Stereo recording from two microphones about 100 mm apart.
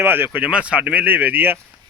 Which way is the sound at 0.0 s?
20° right (ahead or behind).